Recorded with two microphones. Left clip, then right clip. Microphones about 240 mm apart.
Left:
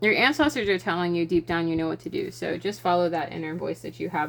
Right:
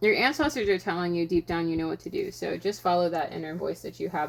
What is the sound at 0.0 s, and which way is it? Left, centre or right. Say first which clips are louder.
Speech: left 2 dB; left.